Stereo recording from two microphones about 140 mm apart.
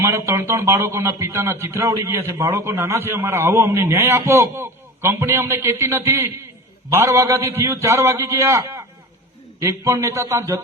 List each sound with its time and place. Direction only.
0.0 s a man's voice: 20° right (ahead or behind)